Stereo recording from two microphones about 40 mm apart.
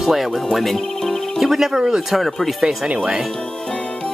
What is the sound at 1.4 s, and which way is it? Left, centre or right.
Speech, centre.